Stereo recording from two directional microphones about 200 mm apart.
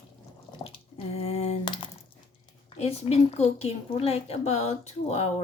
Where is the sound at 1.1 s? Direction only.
30° left (ahead or behind).